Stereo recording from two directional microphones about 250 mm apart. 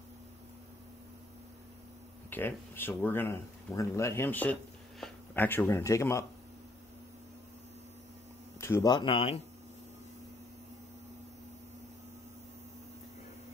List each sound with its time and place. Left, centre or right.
2.2 s speech: centre
8.5 s speech: centre